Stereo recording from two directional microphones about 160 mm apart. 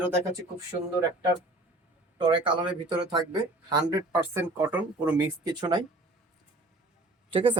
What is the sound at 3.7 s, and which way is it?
Speech, 20° right (ahead or behind).